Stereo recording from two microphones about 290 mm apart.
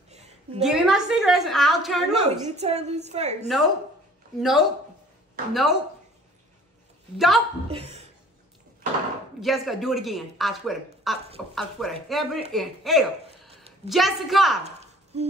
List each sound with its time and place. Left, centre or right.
0.6 s speech: centre
2.2 s a woman's voice: right
4.4 s speech: centre
7.2 s speech: centre
7.7 s speech: right
9.4 s a woman's voice: centre
14.6 s a sound: right